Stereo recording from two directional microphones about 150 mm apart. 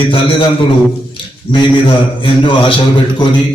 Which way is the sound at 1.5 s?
35° left (ahead or behind).